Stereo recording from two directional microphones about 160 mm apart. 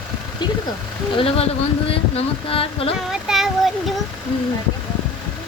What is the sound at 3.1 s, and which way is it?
Speech, centre (ahead or behind).